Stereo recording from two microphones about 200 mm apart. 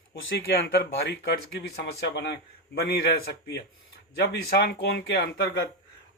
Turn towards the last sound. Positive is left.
turn(degrees=60)  # may be behind; listen again after turning